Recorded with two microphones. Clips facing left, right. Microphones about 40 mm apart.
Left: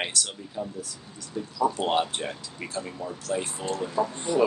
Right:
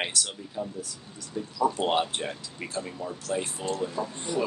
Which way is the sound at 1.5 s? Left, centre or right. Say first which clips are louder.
Left 1 dB; centre.